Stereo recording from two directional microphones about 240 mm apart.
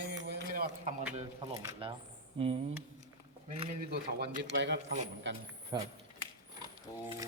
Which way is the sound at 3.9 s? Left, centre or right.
Right.